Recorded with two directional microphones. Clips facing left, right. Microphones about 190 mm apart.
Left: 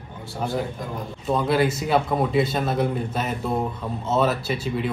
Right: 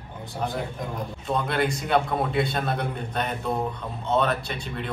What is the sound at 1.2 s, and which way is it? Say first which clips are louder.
A man's voice: left 5 dB; 5° left (ahead or behind).